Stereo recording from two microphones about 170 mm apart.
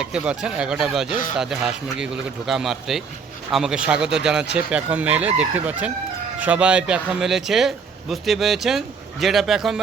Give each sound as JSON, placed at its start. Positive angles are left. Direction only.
{"t": 0.0, "sound": "speech", "side_deg": -5}